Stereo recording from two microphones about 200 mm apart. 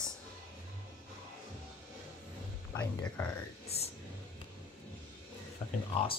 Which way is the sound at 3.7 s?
30° left (ahead or behind).